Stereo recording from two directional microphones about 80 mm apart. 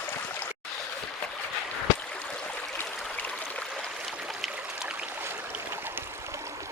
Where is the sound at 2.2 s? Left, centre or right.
Centre.